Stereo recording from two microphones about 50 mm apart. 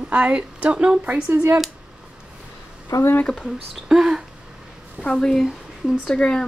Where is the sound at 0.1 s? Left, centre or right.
Right.